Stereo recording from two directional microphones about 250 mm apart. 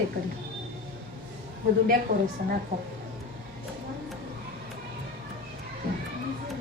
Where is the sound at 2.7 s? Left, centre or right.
Right.